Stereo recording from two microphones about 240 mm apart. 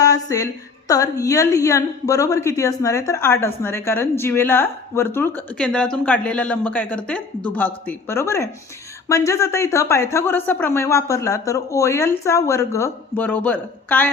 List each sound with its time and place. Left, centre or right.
0.0 s a woman's voice: centre